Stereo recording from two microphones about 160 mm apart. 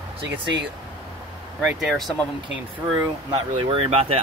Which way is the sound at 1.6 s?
5° right (ahead or behind).